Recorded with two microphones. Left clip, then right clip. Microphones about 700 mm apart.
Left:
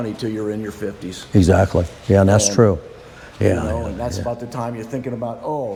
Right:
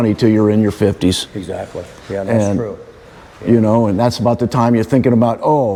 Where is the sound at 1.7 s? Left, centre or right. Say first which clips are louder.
Left 7 dB; left.